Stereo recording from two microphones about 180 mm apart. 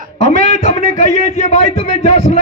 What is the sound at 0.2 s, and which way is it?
A man's voice, 40° left (ahead or behind).